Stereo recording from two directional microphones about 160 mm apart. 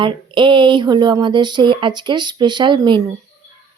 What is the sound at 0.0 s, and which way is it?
Speech, 30° right (ahead or behind).